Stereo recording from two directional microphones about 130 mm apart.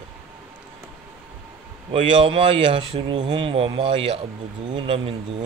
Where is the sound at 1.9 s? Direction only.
40° right (ahead or behind).